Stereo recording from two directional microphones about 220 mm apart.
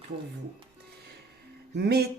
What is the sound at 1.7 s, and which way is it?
Speech, 45° right (ahead or behind).